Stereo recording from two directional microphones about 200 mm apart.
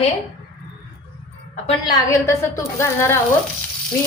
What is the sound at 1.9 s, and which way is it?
Speech, 15° left (ahead or behind).